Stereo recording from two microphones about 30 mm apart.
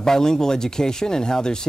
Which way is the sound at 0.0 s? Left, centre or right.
Centre.